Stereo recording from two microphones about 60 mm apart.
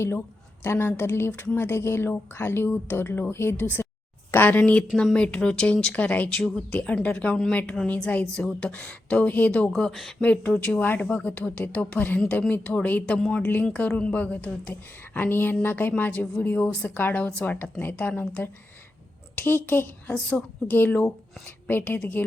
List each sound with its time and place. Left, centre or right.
0.6 s a woman's voice: left
5.1 s a woman's voice: centre
9.6 s speech: centre
10.2 s a woman's voice: left
15.1 s a woman's voice: left
19.4 s a woman's voice: left